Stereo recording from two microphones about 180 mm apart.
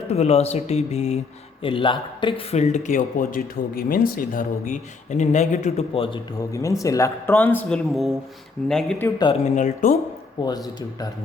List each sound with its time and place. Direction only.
0.1 s speech: 35° left (ahead or behind)
6.5 s speech: 15° left (ahead or behind)
9.0 s speech: 20° left (ahead or behind)
9.4 s speech: 40° left (ahead or behind)
10.4 s speech: 25° left (ahead or behind)